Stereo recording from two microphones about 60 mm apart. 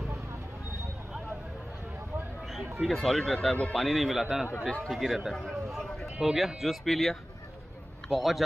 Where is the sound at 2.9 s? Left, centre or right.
Centre.